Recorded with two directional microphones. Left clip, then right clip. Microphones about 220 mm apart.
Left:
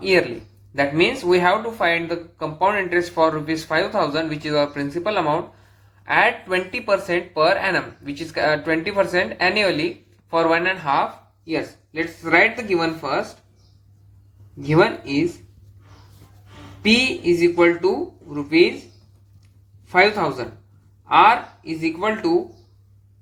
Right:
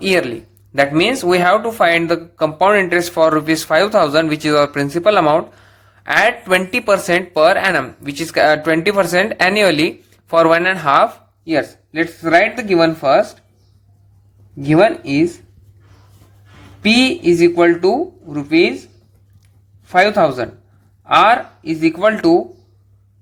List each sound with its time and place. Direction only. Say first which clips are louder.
0.0 s speech: right 3 dB; 45° right (ahead or behind)
14.7 s speech: right 5 dB; 55° right (ahead or behind)
16.8 s speech: right 5 dB; 55° right (ahead or behind)
19.8 s speech: right 5 dB; 55° right (ahead or behind)